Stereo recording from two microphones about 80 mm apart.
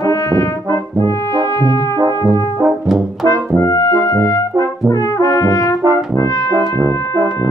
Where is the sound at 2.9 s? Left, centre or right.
Centre.